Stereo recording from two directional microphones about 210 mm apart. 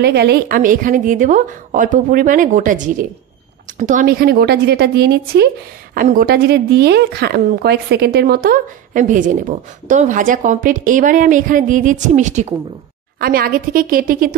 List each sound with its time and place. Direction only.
0.0 s a woman's voice: 50° right (ahead or behind)